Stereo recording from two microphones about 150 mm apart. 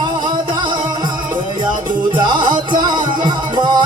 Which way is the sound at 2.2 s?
30° right (ahead or behind).